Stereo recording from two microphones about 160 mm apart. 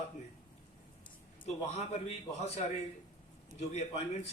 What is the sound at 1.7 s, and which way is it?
A man's voice, 40° left (ahead or behind).